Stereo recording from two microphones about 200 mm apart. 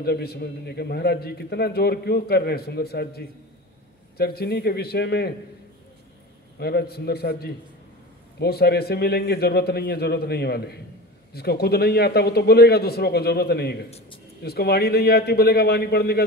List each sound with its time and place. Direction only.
0.0 s a man's voice: 50° left (ahead or behind)
6.6 s a man's voice: 55° left (ahead or behind)
13.8 s a man's voice: 30° left (ahead or behind)
14.4 s a man's voice: 55° left (ahead or behind)